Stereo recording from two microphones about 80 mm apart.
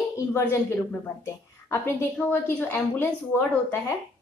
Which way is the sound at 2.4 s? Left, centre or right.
Left.